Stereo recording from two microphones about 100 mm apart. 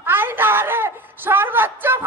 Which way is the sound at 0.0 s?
20° right (ahead or behind).